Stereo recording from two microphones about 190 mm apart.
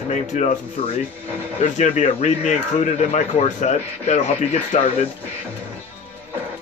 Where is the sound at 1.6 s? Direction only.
40° left (ahead or behind).